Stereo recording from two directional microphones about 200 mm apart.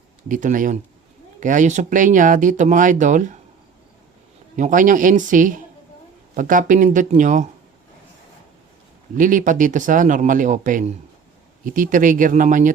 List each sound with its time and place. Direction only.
0.3 s speech: 40° right (ahead or behind)
4.5 s speech: 40° right (ahead or behind)
9.1 s speech: 40° right (ahead or behind)